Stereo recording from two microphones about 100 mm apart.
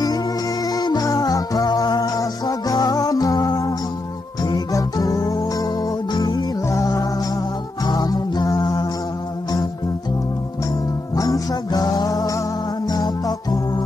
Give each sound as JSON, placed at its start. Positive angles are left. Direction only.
{"t": 0.7, "sound": "music", "side_deg": 40}
{"t": 11.1, "sound": "music", "side_deg": 35}